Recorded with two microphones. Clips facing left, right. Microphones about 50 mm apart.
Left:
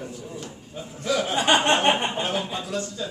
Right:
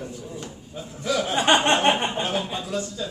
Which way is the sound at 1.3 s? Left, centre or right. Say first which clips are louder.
Right 2 dB; right.